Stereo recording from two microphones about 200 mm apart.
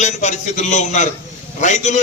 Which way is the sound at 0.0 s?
35° left (ahead or behind).